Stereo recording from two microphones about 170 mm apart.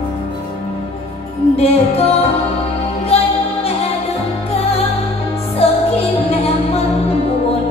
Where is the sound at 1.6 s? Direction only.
35° left (ahead or behind).